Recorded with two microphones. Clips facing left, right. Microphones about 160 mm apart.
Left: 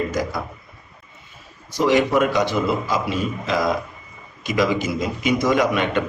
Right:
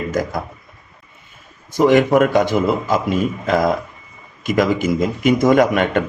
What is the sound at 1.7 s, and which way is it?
A man's voice, 50° right (ahead or behind).